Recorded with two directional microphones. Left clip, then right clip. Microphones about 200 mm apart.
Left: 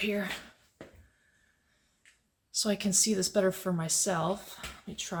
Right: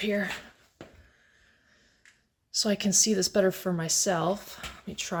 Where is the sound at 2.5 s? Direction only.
20° right (ahead or behind).